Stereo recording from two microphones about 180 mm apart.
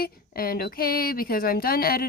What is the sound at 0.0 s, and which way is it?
A woman's voice, 55° left (ahead or behind).